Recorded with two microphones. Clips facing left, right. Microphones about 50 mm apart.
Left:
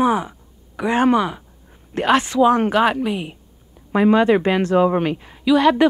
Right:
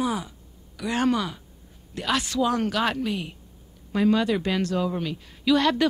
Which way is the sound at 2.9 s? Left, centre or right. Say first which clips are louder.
Left 6 dB; centre.